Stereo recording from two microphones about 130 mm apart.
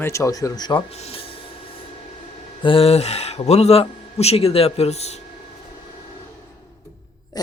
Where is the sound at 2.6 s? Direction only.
45° left (ahead or behind).